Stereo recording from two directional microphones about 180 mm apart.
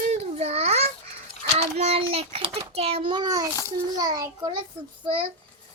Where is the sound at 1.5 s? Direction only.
35° right (ahead or behind).